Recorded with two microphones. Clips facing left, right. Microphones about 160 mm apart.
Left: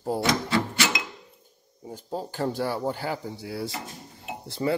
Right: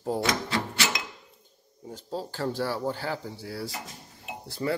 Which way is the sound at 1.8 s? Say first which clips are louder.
Left 1 dB; 15° left (ahead or behind).